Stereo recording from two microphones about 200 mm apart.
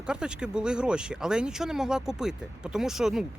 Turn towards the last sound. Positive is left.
turn(degrees=0)  # may be behind; listen again after turning